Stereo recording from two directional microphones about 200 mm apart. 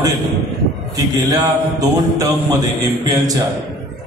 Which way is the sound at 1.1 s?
20° right (ahead or behind).